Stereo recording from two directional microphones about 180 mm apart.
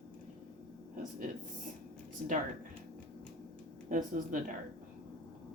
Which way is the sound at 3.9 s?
45° right (ahead or behind).